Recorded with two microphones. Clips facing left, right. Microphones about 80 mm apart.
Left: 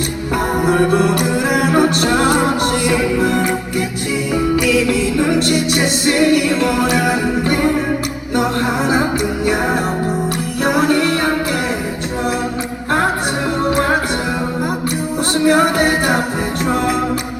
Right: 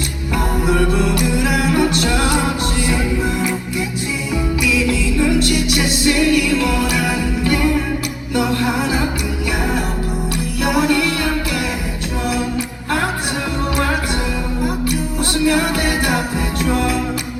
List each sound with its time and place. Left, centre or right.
0.7 s music: left
5.2 s music: left
10.6 s music: left
15.4 s music: left